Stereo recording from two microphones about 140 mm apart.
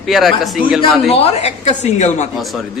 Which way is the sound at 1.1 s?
45° left (ahead or behind).